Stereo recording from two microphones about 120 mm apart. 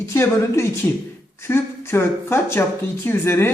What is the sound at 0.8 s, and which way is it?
A man's voice, 15° left (ahead or behind).